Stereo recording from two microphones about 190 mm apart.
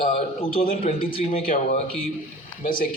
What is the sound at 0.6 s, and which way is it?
Speech, 50° left (ahead or behind).